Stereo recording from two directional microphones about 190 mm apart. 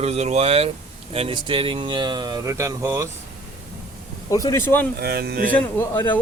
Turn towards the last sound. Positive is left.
turn(degrees=10)  # may be behind; listen again after turning